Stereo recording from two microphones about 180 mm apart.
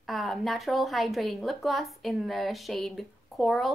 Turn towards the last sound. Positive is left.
turn(degrees=0)  # may be behind; listen again after turning